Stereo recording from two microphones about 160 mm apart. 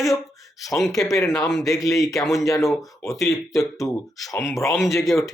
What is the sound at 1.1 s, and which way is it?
Speech, 20° left (ahead or behind).